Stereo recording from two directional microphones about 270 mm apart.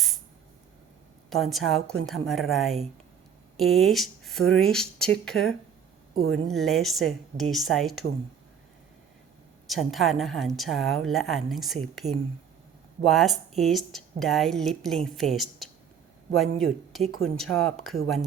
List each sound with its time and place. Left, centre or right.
1.3 s a woman's voice: centre
6.1 s speech: right
6.5 s a woman's voice: centre
9.6 s a woman's voice: centre
13.1 s a woman's voice: centre
17.1 s speech: right
17.3 s a woman's voice: centre